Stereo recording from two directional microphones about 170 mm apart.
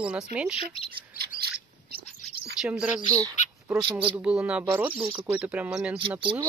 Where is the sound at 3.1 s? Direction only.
20° right (ahead or behind).